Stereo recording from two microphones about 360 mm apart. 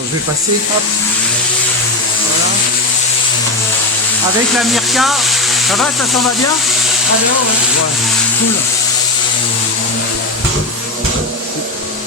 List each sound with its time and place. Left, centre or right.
4.7 s speech: centre